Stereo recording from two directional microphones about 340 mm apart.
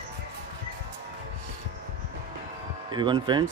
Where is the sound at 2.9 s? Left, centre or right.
Centre.